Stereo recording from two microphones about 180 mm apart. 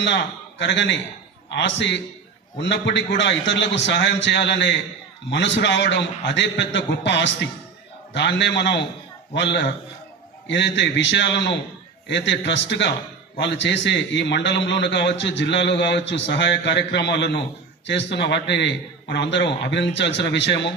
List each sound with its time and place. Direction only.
0.0 s a man's voice: 80° left